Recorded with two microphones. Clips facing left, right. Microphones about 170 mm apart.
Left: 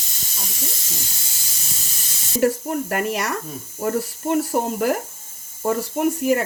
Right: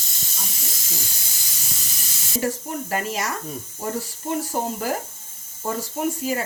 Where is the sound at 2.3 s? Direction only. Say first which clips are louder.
Left 6 dB; 55° left (ahead or behind).